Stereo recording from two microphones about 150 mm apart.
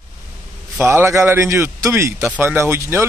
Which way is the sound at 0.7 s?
15° right (ahead or behind).